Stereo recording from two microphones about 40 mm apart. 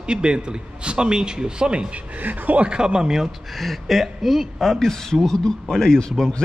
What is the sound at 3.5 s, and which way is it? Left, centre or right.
A man's voice, centre.